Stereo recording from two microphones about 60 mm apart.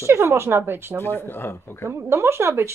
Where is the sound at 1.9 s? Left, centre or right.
Right.